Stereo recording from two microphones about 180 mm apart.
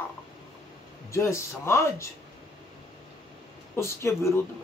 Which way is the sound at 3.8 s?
15° left (ahead or behind).